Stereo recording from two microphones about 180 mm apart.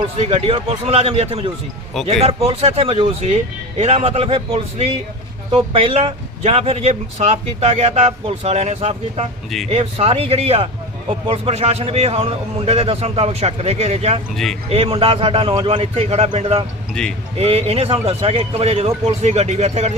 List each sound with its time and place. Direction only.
0.2 s speech: 35° right (ahead or behind)
17.0 s speech: 5° left (ahead or behind)
17.3 s speech: 35° right (ahead or behind)